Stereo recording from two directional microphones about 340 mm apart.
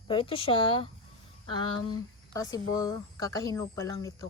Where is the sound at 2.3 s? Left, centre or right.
Centre.